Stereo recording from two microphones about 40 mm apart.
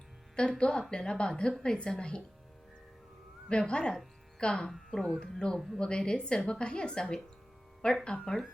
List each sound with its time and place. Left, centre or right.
0.6 s a woman's voice: left
3.5 s a woman's voice: left
4.9 s speech: centre
5.2 s a woman's voice: left
5.5 s speech: centre
5.8 s a woman's voice: left
8.2 s speech: centre